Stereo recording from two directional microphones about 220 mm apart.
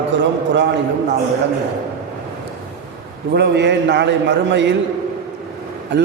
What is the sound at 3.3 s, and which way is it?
A man's voice, 50° right (ahead or behind).